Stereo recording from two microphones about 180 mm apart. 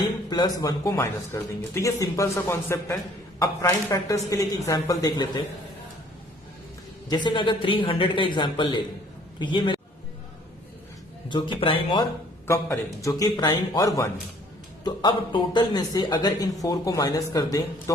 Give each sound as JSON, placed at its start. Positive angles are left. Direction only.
{"t": 0.3, "sound": "speech", "side_deg": 20}
{"t": 7.1, "sound": "a man's voice", "side_deg": 25}
{"t": 11.3, "sound": "speech", "side_deg": 25}
{"t": 12.5, "sound": "speech", "side_deg": 15}